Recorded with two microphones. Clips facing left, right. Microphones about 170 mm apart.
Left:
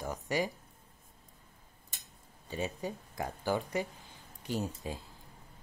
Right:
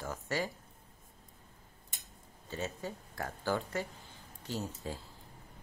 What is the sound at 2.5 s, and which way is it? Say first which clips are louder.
A woman's voice: left 3 dB; 15° left (ahead or behind).